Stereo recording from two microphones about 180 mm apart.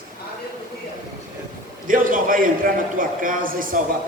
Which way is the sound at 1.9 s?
50° right (ahead or behind).